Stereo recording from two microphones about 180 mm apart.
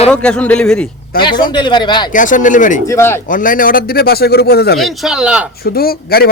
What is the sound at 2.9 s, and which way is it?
Speech, 15° left (ahead or behind).